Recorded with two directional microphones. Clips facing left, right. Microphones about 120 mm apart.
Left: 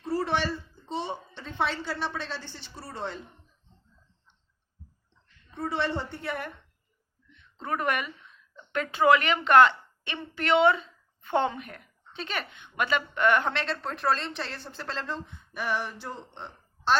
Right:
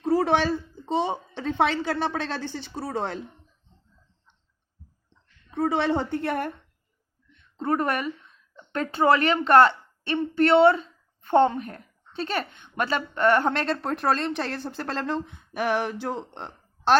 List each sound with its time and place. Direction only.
0.0 s a sound: 75° right (ahead or behind)
1.4 s a woman's voice: 85° right
5.5 s a woman's voice: 90° right
6.2 s a woman's voice: 50° right (ahead or behind); by 16.5 s 90° right